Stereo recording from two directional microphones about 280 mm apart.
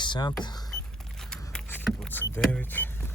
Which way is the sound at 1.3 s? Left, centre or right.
Centre.